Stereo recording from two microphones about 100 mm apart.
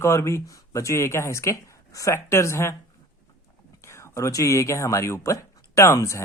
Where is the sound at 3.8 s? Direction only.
25° left (ahead or behind).